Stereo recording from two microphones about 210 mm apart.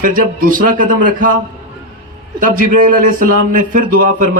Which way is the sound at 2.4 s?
40° right (ahead or behind).